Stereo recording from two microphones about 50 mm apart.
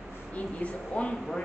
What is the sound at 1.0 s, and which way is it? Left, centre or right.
Speech, left.